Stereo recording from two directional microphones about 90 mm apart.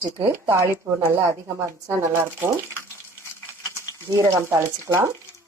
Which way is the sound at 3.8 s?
30° right (ahead or behind).